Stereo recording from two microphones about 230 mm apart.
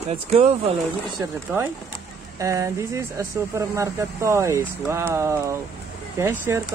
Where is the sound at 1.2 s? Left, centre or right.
Centre.